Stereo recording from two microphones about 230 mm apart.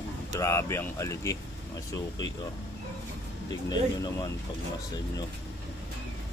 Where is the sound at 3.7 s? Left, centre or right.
Centre.